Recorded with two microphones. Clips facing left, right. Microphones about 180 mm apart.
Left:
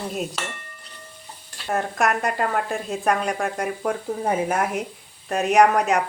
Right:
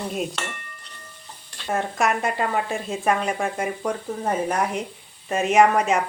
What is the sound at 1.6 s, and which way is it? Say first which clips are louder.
Speech: even; centre (ahead or behind).